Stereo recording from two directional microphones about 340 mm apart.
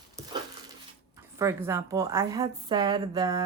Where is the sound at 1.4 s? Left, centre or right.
Centre.